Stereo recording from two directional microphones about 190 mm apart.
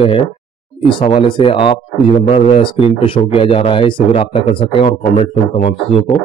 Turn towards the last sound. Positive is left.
turn(degrees=40)  # may be behind; listen again after turning